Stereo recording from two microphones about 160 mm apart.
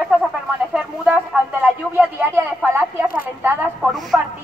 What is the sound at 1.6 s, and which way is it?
Speech, 10° right (ahead or behind).